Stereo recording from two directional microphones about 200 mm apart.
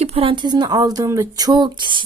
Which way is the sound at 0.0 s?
30° right (ahead or behind).